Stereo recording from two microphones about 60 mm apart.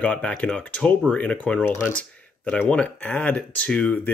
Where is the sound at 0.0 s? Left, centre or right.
Left.